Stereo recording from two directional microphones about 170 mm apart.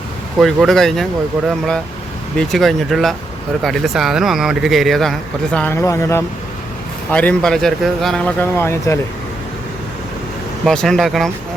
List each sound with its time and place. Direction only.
0.3 s speech: centre (ahead or behind)
5.5 s speech: 15° left (ahead or behind)
10.7 s speech: centre (ahead or behind)